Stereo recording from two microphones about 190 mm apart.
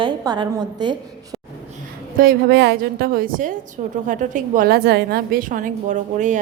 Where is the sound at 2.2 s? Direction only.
60° right (ahead or behind); by 6.4 s 40° right (ahead or behind).